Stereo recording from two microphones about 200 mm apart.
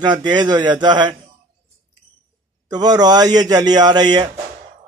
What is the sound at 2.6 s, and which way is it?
Speech, 20° right (ahead or behind).